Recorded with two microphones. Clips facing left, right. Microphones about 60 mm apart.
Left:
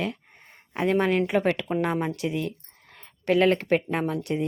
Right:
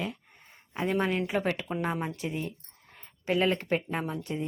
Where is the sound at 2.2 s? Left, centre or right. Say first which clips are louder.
Left 6 dB; left.